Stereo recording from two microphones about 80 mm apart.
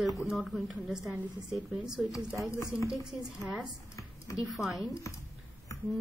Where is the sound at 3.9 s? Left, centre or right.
Left.